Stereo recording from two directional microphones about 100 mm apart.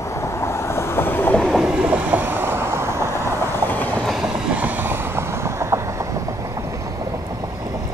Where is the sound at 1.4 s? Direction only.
5° left (ahead or behind).